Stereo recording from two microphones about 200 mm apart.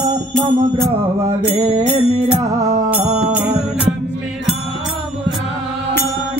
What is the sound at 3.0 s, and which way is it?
Music, 35° right (ahead or behind).